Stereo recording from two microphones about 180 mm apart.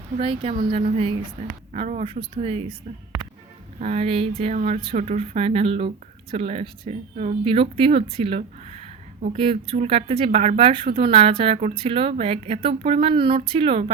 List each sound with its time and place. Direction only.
0.2 s speech: 30° right (ahead or behind)
3.8 s speech: 40° right (ahead or behind)